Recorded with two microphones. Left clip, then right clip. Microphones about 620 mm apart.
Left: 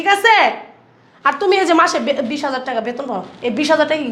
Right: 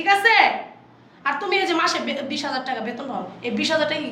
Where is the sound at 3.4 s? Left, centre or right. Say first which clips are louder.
Left 7 dB; left.